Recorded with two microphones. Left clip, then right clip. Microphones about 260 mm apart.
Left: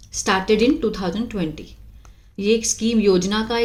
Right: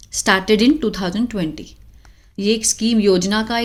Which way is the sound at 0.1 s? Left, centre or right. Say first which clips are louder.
Right 3 dB; right.